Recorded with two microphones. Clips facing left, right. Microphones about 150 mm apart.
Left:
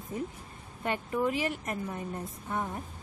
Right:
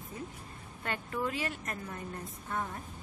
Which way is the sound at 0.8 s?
15° left (ahead or behind).